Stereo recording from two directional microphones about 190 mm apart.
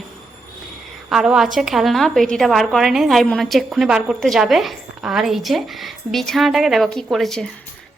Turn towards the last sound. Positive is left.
turn(degrees=0)  # may be behind; listen again after turning